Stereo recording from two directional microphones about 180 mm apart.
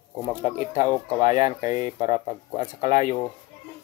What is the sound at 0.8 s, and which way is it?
Speech, 15° left (ahead or behind).